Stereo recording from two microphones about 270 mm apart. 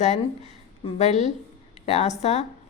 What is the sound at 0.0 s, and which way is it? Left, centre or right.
A woman's voice, left.